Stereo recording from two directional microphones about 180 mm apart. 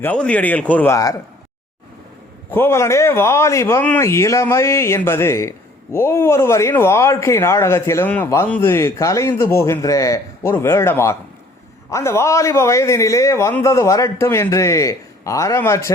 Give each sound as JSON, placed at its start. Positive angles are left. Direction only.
{"t": 0.0, "sound": "a man's voice", "side_deg": 5}
{"t": 2.5, "sound": "a man's voice", "side_deg": 10}